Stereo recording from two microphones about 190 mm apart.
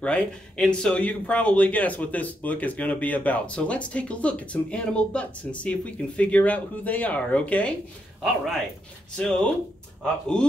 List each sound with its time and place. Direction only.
0.0 s speech: 5° left (ahead or behind)